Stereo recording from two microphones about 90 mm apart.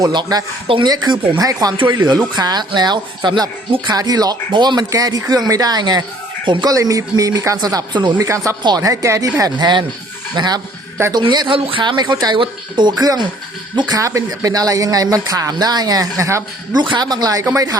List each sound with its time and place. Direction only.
0.0 s speech: 50° right (ahead or behind)
0.9 s speech: 60° right (ahead or behind)
1.4 s speech: 40° right (ahead or behind)
1.7 s speech: 65° right (ahead or behind)
2.1 s speech: 50° right (ahead or behind)
6.7 s speech: 40° right (ahead or behind)
10.3 s speech: 50° right (ahead or behind)
11.5 s speech: 70° right (ahead or behind); by 16.4 s 35° right (ahead or behind)
16.9 s speech: 50° right (ahead or behind)